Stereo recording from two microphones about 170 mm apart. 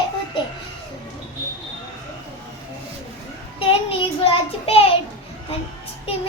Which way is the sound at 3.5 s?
30° left (ahead or behind).